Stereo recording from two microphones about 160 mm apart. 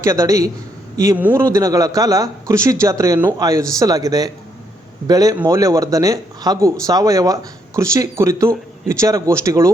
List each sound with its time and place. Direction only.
0.0 s a man's voice: 20° right (ahead or behind)